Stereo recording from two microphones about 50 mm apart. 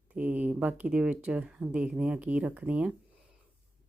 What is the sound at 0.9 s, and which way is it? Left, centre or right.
Speech, right.